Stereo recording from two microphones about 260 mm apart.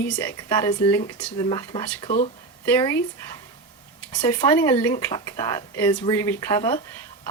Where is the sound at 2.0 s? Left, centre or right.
Left.